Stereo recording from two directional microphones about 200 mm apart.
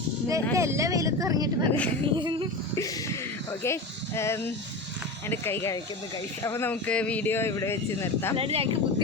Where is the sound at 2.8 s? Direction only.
15° left (ahead or behind).